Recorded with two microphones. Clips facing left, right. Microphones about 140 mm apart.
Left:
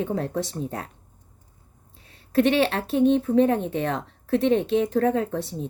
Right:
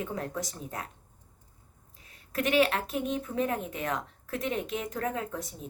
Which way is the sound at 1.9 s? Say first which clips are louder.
Left 12 dB; 30° left (ahead or behind).